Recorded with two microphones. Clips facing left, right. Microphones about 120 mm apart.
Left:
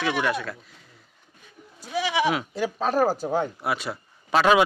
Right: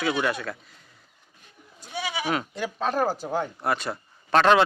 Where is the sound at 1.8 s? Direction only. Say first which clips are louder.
Left 7 dB; 90° left.